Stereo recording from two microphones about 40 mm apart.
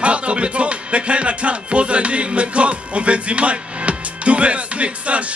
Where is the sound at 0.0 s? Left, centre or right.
Right.